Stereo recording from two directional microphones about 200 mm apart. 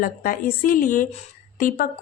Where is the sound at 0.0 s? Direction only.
45° left (ahead or behind).